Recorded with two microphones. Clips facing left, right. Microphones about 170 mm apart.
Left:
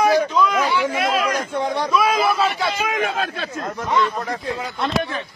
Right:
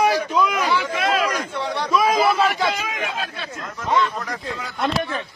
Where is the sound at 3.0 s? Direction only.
45° left (ahead or behind).